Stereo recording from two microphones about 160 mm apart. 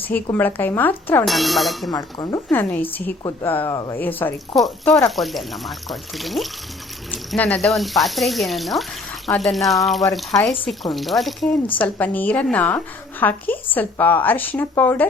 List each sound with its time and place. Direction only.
0.0 s a woman's voice: 10° left (ahead or behind)
1.2 s speech: centre (ahead or behind)
1.9 s speech: 25° left (ahead or behind)
2.5 s a woman's voice: 15° left (ahead or behind)
4.5 s a woman's voice: centre (ahead or behind)